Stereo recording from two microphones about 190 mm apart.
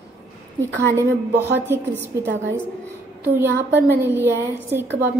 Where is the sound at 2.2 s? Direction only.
75° right (ahead or behind).